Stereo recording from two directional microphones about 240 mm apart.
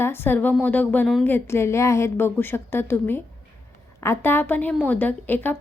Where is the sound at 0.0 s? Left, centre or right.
Centre.